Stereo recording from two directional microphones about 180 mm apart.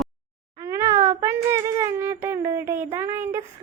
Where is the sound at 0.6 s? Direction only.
15° right (ahead or behind).